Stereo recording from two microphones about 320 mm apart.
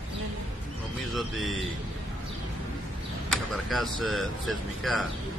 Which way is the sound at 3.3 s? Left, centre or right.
Centre.